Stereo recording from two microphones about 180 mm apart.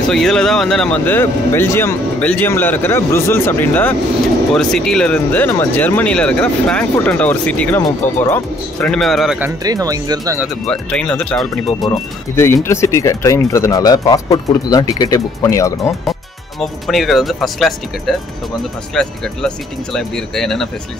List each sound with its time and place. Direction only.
0.1 s speech: 5° left (ahead or behind)
9.6 s speech: 20° right (ahead or behind)
10.7 s speech: 5° left (ahead or behind)
11.8 s speech: 20° left (ahead or behind)
16.1 s speech: centre (ahead or behind)